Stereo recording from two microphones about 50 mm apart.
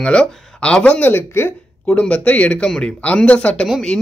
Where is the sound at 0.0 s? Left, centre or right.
Left.